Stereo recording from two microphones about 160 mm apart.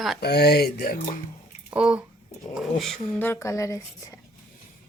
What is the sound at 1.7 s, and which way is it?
A woman's voice, 5° right (ahead or behind).